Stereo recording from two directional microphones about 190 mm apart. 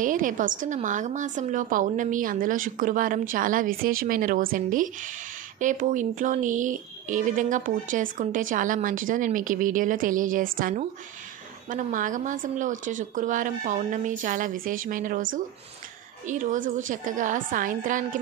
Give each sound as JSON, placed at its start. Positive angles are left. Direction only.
{"t": 0.0, "sound": "speech", "side_deg": -45}
{"t": 16.3, "sound": "speech", "side_deg": -40}